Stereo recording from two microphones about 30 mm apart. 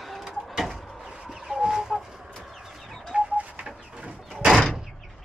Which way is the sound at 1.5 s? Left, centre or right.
Right.